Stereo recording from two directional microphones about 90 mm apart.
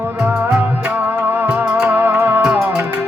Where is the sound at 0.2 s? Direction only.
10° right (ahead or behind).